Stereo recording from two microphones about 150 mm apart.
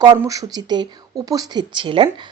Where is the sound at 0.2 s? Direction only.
20° right (ahead or behind).